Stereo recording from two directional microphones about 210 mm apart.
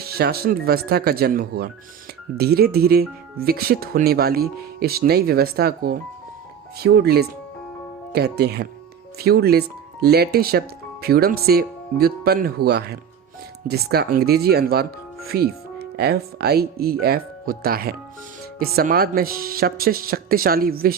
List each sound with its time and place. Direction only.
0.0 s speech: 45° right (ahead or behind)